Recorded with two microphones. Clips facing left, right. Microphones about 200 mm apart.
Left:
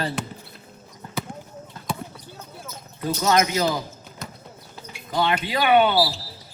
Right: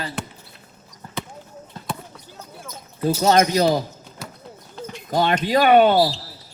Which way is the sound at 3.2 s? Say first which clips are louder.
Right 4 dB; 30° right (ahead or behind).